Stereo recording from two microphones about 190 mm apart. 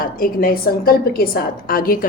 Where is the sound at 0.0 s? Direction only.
50° left (ahead or behind).